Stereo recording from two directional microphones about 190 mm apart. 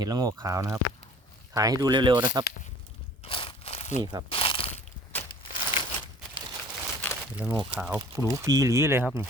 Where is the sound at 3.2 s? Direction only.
30° left (ahead or behind).